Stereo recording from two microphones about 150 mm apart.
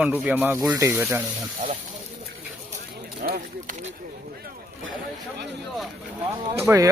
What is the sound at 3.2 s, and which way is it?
Run, 65° right (ahead or behind).